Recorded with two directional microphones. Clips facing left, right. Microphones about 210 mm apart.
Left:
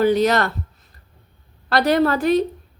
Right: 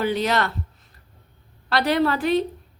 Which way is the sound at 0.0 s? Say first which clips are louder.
Left 6 dB; 45° left (ahead or behind).